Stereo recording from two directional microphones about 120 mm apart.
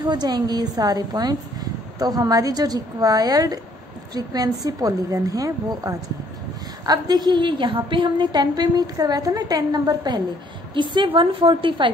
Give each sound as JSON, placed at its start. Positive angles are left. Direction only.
{"t": 0.0, "sound": "a woman's voice", "side_deg": -35}